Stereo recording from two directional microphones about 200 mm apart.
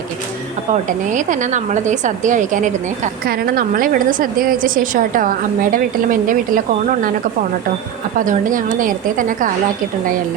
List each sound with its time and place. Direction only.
0.9 s a woman's voice: 40° right (ahead or behind)
8.2 s a woman's voice: 40° right (ahead or behind)